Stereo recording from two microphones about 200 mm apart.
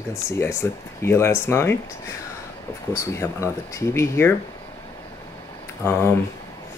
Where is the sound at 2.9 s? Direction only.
15° left (ahead or behind).